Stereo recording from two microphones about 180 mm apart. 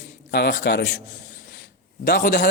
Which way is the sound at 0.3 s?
70° left (ahead or behind).